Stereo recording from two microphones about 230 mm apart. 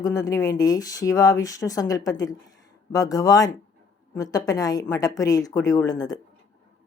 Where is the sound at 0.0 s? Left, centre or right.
Centre.